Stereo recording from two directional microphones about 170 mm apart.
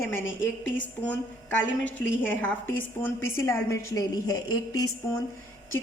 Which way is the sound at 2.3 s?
10° left (ahead or behind).